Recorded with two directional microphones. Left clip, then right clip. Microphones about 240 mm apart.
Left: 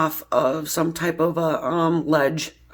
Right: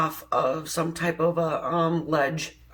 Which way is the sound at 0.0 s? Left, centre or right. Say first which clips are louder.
Left 4 dB; left.